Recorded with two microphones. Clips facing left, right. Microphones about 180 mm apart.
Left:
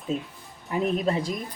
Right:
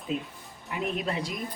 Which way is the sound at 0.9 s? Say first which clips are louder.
Left 6 dB; 40° left (ahead or behind).